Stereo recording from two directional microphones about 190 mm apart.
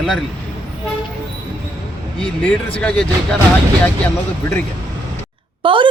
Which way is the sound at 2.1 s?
5° left (ahead or behind).